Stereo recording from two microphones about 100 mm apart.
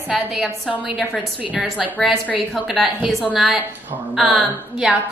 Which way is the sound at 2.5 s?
Centre (ahead or behind).